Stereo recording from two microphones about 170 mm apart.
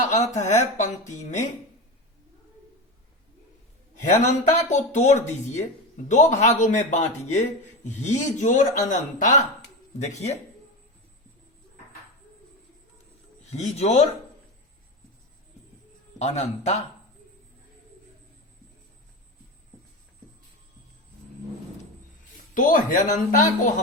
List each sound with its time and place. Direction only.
0.0 s speech: 45° left (ahead or behind)
4.0 s a man's voice: 45° left (ahead or behind)
13.5 s a man's voice: 40° left (ahead or behind)
16.1 s a man's voice: 40° left (ahead or behind)
22.5 s speech: 50° left (ahead or behind)